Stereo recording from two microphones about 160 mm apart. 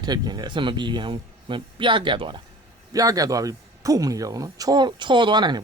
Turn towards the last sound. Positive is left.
turn(degrees=-25)  # may be behind; listen again after turning